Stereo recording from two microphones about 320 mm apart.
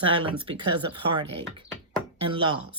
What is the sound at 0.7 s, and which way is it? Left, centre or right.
Speech, right.